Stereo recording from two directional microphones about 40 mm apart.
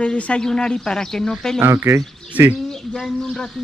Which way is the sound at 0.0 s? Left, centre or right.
Left.